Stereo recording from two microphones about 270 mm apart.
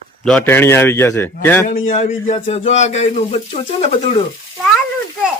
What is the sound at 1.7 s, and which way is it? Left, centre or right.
A man's voice, left.